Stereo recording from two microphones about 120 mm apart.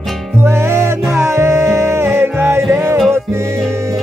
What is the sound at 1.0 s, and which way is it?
Music, centre (ahead or behind).